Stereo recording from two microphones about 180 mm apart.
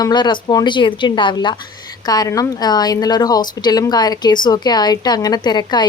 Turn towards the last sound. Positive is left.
turn(degrees=25)  # may be behind; listen again after turning